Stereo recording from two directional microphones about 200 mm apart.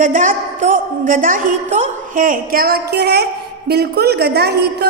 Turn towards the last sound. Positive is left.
turn(degrees=-55)  # may be behind; listen again after turning